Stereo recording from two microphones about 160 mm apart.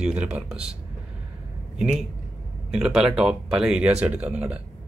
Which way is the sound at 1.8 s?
5° right (ahead or behind).